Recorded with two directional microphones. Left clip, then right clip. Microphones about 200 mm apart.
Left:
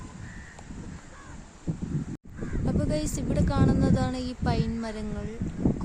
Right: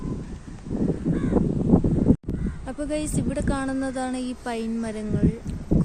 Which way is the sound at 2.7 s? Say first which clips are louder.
Right 2 dB; 5° left (ahead or behind).